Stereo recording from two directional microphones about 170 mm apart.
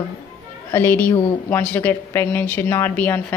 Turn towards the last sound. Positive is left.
turn(degrees=10)  # may be behind; listen again after turning